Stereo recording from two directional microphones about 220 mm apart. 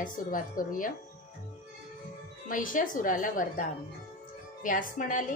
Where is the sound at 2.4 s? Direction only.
40° left (ahead or behind).